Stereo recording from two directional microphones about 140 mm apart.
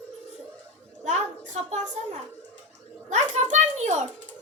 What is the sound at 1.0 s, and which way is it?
A woman's voice, 60° right (ahead or behind).